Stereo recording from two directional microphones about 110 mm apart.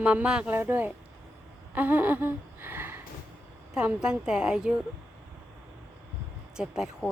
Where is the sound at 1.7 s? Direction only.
15° right (ahead or behind).